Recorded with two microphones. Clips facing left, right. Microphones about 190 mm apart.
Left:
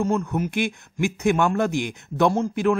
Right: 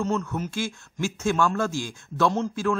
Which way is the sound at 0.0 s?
10° left (ahead or behind).